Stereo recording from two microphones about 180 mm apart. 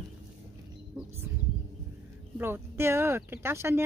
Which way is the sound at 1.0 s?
15° right (ahead or behind).